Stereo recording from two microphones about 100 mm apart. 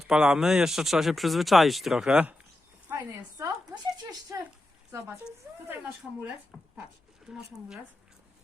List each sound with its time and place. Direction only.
0.1 s speech: 5° right (ahead or behind)
2.9 s a sound: 25° right (ahead or behind)
4.9 s a woman's voice: 30° right (ahead or behind)
5.6 s speech: 15° right (ahead or behind)
6.5 s speech: centre (ahead or behind)